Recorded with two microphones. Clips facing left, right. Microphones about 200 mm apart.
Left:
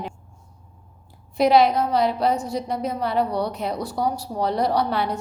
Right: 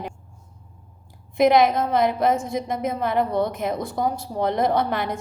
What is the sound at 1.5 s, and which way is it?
A woman's voice, 50° right (ahead or behind).